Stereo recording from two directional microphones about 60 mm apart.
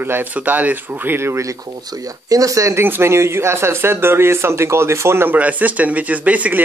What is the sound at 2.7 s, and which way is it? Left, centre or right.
Speech, right.